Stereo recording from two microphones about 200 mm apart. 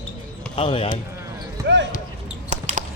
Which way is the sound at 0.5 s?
25° left (ahead or behind).